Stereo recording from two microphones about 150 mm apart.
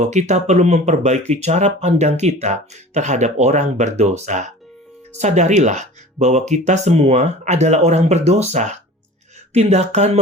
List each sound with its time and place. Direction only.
0.0 s speech: 50° right (ahead or behind)